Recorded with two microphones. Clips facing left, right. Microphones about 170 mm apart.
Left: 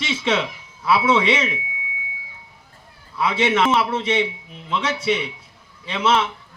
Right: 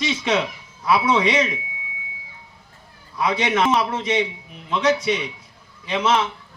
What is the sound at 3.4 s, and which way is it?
Speech, 25° left (ahead or behind).